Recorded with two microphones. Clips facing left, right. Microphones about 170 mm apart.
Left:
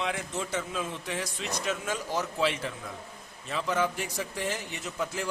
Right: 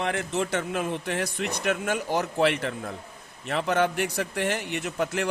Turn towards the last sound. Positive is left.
turn(degrees=-65)  # may be behind; listen again after turning